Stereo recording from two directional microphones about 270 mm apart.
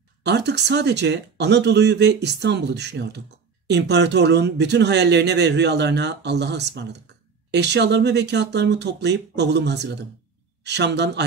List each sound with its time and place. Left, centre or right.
0.2 s speech: right